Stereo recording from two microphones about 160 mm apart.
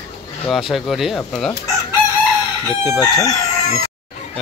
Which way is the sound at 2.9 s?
25° left (ahead or behind).